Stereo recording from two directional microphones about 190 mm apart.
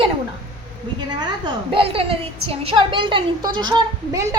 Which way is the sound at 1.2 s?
25° right (ahead or behind).